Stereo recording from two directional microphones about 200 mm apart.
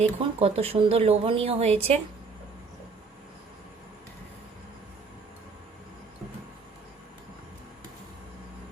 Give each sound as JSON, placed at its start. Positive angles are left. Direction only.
{"t": 0.2, "sound": "speech", "side_deg": -30}